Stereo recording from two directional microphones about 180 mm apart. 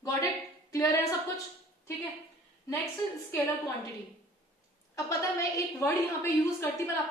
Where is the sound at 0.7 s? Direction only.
15° left (ahead or behind).